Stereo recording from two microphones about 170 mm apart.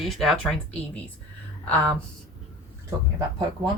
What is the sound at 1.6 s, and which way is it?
Speech, 5° left (ahead or behind).